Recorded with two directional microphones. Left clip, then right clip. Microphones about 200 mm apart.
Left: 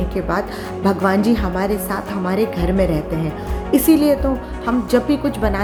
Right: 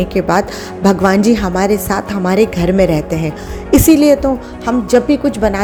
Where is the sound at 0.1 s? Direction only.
40° right (ahead or behind).